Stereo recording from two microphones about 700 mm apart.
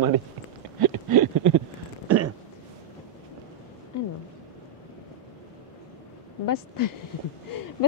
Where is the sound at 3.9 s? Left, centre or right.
Left.